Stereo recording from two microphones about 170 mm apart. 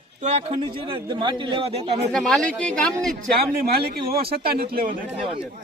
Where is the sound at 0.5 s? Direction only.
25° right (ahead or behind).